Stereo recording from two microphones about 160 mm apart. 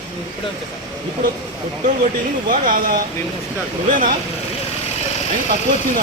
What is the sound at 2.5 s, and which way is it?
Speech, 60° right (ahead or behind).